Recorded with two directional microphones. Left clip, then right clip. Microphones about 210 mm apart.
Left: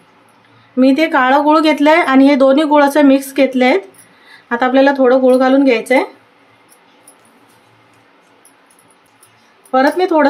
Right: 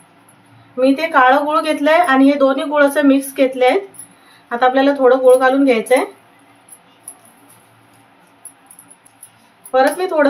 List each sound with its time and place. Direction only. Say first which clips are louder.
0.7 s speech: left 1 dB; 50° left (ahead or behind)
9.7 s speech: left 2 dB; 45° left (ahead or behind)